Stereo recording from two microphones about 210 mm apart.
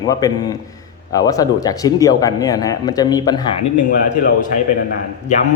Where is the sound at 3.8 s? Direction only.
40° left (ahead or behind).